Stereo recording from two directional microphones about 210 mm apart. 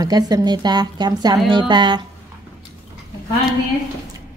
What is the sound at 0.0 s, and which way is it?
A woman's voice, 20° right (ahead or behind).